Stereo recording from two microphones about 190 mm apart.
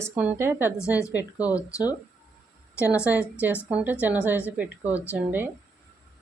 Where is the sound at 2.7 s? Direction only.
15° left (ahead or behind).